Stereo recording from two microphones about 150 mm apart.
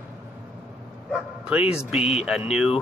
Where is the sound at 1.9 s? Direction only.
45° left (ahead or behind).